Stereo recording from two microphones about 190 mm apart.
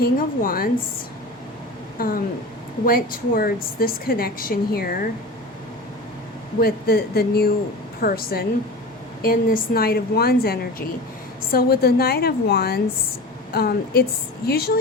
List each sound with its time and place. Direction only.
0.0 s a woman's voice: 50° left (ahead or behind)
2.0 s a woman's voice: 50° left (ahead or behind)
6.6 s a woman's voice: 55° left (ahead or behind)